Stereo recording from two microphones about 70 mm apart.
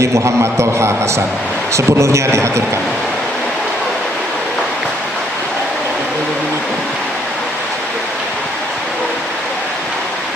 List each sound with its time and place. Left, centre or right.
0.0 s a man's voice: right